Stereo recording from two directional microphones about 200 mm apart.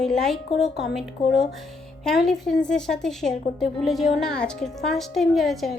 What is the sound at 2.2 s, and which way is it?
A woman's voice, centre (ahead or behind).